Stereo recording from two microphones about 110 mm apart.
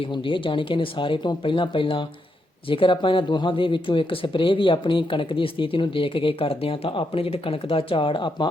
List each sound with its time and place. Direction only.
0.0 s speech: 50° left (ahead or behind)